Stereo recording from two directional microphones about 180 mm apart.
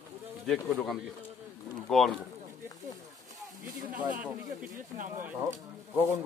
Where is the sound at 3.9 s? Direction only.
10° right (ahead or behind).